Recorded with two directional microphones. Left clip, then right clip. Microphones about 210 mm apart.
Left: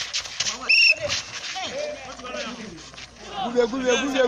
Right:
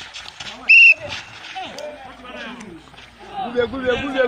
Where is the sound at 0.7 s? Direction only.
55° left (ahead or behind).